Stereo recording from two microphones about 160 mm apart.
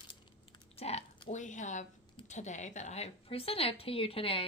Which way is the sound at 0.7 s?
40° left (ahead or behind).